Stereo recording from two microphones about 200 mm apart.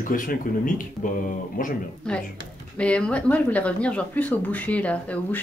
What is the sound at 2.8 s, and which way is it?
Speech, 5° left (ahead or behind).